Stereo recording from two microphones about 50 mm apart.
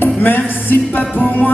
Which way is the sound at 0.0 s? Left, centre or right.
Left.